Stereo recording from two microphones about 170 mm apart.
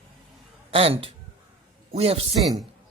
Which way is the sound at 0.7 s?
35° right (ahead or behind).